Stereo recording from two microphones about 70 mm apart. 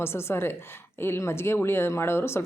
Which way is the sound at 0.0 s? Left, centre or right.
Left.